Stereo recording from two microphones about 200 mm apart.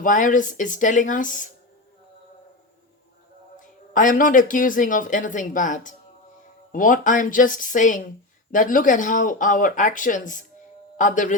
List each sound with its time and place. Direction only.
0.0 s speech: 40° left (ahead or behind)
3.6 s a man's voice: 40° left (ahead or behind)